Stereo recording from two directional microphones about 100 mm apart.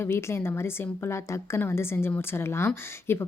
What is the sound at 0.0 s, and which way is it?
A woman's voice, 25° left (ahead or behind).